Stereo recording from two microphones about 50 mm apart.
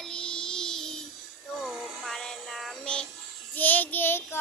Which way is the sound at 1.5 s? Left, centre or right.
Centre.